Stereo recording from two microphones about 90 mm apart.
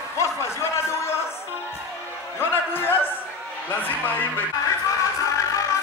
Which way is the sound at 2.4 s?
25° left (ahead or behind).